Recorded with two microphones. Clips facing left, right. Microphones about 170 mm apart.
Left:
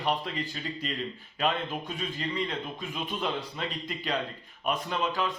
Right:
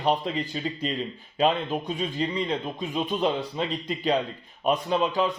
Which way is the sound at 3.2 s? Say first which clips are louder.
Right 7 dB; 30° right (ahead or behind).